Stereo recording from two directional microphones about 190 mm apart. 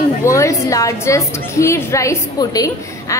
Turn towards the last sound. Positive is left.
turn(degrees=15)  # may be behind; listen again after turning